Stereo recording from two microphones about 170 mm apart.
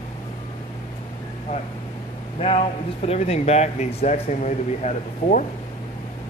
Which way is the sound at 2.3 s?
40° left (ahead or behind).